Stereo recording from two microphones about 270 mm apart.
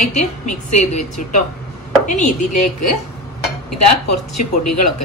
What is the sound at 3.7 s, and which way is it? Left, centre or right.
Speech, left.